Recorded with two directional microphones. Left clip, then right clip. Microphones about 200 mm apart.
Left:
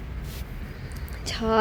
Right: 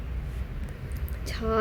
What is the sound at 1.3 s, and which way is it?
Music, 20° left (ahead or behind).